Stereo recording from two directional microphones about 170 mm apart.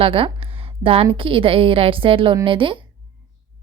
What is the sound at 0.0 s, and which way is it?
Speech, 30° right (ahead or behind).